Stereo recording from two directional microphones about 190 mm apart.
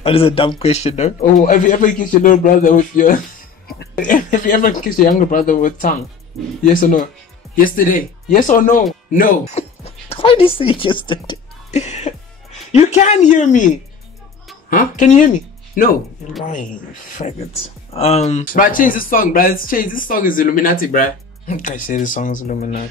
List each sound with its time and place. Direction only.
0.0 s speech: 30° left (ahead or behind)
11.7 s speech: 35° left (ahead or behind)
14.7 s speech: 45° left (ahead or behind)
17.9 s speech: 35° left (ahead or behind)
18.5 s speech: 45° left (ahead or behind)